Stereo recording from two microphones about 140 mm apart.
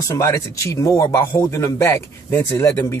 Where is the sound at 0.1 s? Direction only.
20° left (ahead or behind).